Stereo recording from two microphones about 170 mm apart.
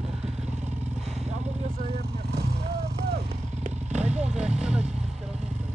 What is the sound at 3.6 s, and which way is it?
Vehicle, 45° right (ahead or behind).